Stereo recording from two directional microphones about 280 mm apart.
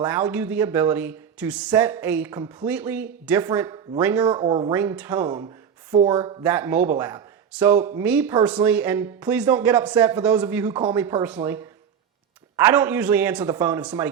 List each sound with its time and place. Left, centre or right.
0.0 s speech: centre